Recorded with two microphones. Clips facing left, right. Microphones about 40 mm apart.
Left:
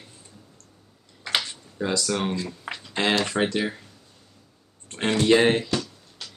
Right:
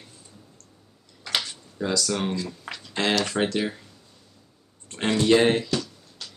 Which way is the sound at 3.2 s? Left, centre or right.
Centre.